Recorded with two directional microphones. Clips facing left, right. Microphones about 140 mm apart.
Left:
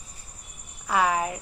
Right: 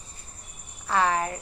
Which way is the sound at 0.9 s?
10° left (ahead or behind).